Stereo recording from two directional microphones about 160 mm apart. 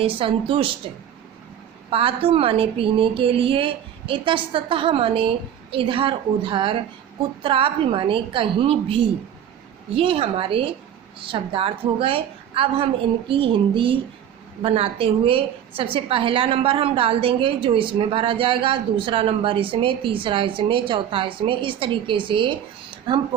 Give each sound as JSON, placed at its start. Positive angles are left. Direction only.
{"t": 0.0, "sound": "a woman's voice", "side_deg": -35}
{"t": 1.9, "sound": "a woman's voice", "side_deg": -35}